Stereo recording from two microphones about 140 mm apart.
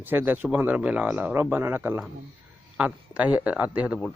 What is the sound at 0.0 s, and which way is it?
Speech, 15° right (ahead or behind).